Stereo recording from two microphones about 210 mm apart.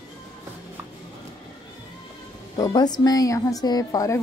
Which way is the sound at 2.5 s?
20° left (ahead or behind).